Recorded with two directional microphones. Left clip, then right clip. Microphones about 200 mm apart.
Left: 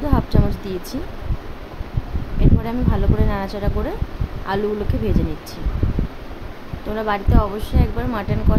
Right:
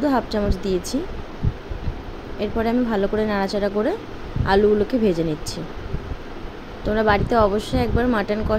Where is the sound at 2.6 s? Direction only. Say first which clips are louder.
Right 4 dB; 15° right (ahead or behind).